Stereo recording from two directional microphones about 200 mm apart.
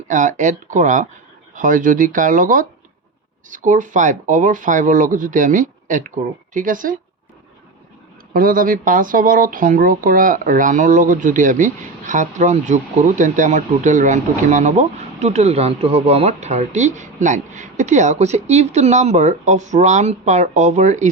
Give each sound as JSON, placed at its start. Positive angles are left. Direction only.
{"t": 0.1, "sound": "speech", "side_deg": -40}
{"t": 8.3, "sound": "speech", "side_deg": -45}